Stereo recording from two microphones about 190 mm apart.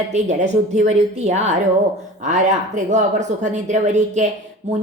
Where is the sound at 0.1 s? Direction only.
35° right (ahead or behind).